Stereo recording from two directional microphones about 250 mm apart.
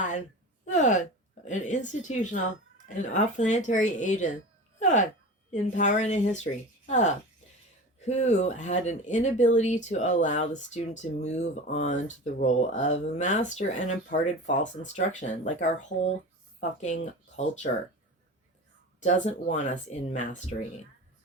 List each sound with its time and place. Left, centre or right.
0.6 s speech: left
19.0 s speech: left